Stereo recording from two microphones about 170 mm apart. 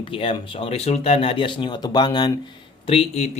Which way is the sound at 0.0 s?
30° left (ahead or behind).